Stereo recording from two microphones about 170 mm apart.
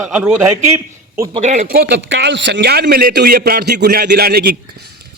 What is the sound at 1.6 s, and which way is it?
A man's voice, 65° right (ahead or behind).